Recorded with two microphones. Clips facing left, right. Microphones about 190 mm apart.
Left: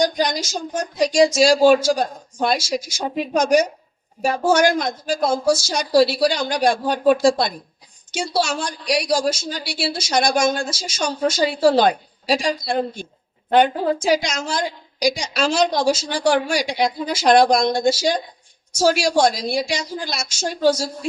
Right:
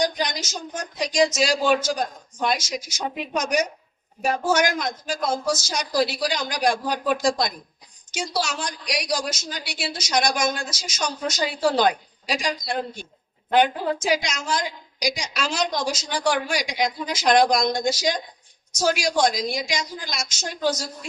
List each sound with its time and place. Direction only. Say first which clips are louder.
0.0 s a woman's voice: left 5 dB; 30° left (ahead or behind)
14.0 s a woman's voice: left 5 dB; 30° left (ahead or behind)